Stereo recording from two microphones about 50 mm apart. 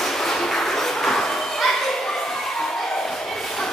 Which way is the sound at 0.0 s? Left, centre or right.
Centre.